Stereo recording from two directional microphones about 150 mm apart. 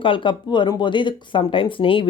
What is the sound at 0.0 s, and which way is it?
Speech, 35° left (ahead or behind).